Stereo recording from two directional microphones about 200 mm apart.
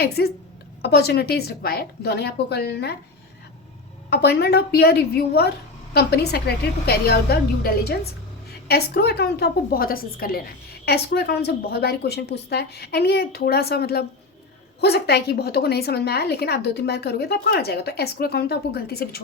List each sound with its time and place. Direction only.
0.0 s a woman's voice: 55° left (ahead or behind)
4.1 s a woman's voice: 55° left (ahead or behind)